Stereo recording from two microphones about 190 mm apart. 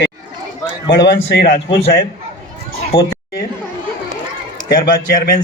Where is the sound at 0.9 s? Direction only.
60° left (ahead or behind).